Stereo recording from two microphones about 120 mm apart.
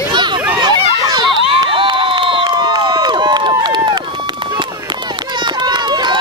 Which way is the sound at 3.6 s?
35° right (ahead or behind).